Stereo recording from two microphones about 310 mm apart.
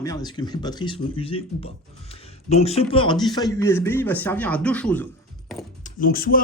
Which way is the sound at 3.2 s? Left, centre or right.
Centre.